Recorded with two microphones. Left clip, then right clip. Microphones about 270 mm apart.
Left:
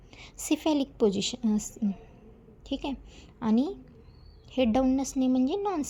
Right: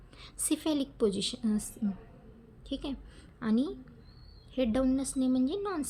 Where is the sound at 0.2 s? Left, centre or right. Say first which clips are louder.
Left 4 dB; centre.